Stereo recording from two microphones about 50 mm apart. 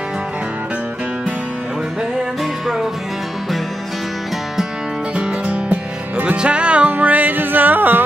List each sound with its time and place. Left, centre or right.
2.6 s music: centre
5.1 s music: right